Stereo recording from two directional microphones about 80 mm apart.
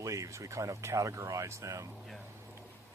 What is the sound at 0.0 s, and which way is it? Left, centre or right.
Speech, right.